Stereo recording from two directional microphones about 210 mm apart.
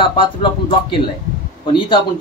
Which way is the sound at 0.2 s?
25° left (ahead or behind).